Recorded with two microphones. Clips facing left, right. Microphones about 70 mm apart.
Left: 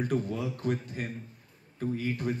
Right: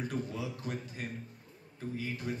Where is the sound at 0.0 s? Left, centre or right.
Left.